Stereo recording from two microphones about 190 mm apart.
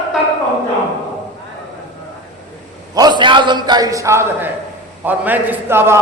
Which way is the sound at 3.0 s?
25° right (ahead or behind).